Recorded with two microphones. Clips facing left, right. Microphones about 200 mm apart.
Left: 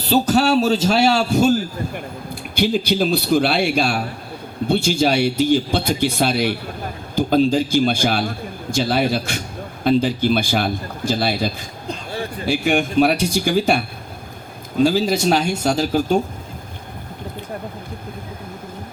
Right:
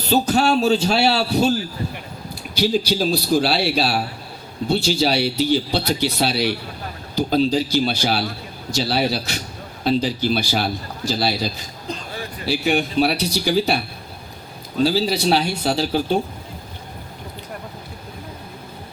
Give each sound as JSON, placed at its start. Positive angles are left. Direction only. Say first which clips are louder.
{"t": 0.0, "sound": "a man's voice", "louder": "left 2 dB", "side_deg": 40}